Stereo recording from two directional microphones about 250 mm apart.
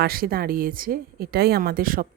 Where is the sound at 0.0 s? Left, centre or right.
Right.